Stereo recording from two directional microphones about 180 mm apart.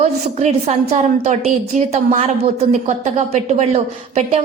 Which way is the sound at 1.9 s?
35° right (ahead or behind).